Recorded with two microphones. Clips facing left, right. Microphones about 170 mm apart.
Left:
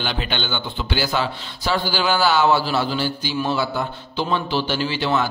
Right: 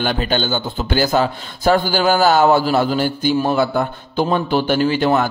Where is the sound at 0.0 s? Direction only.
45° right (ahead or behind).